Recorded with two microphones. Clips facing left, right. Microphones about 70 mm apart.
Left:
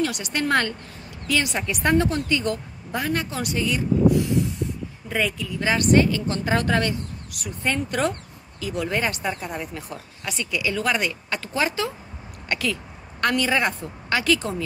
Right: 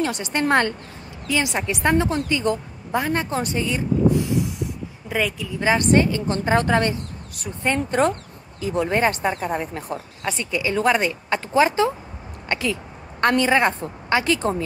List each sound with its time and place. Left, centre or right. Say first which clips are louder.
0.0 s a woman's voice: right 2 dB; right
5.1 s speech: right 1 dB; centre
5.6 s a woman's voice: right 1 dB; right